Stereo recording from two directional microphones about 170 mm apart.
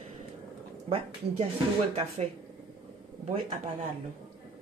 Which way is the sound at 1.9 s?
40° right (ahead or behind).